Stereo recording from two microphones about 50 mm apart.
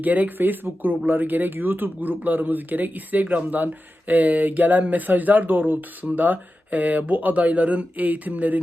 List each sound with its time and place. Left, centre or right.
0.0 s speech: right